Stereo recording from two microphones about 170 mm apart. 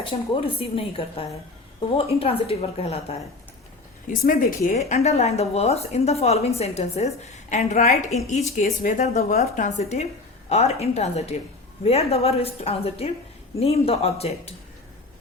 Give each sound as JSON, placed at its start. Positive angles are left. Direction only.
{"t": 0.0, "sound": "speech", "side_deg": 30}
{"t": 4.1, "sound": "a woman's voice", "side_deg": 55}